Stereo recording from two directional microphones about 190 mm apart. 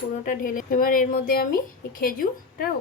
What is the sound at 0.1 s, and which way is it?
Speech, 45° left (ahead or behind).